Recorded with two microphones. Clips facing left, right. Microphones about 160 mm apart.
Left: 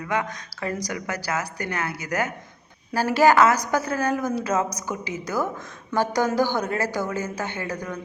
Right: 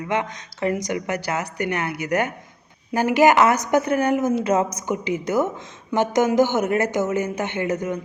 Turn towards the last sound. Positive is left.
turn(degrees=-25)  # may be behind; listen again after turning